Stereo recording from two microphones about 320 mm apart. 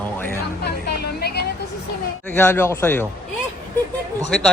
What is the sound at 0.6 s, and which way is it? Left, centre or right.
Vehicle, left.